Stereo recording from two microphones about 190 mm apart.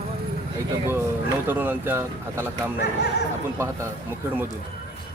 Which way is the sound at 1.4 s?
10° right (ahead or behind).